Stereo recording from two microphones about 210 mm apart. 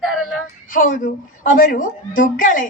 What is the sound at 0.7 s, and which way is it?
A woman's voice, 40° left (ahead or behind).